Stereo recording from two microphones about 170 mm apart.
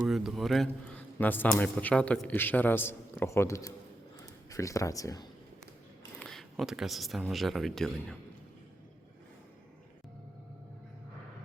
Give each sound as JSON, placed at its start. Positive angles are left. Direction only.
{"t": 0.0, "sound": "a man's voice", "side_deg": -5}
{"t": 6.1, "sound": "speech", "side_deg": 0}